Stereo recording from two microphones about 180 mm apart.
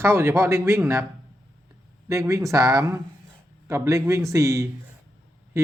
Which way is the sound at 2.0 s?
15° right (ahead or behind).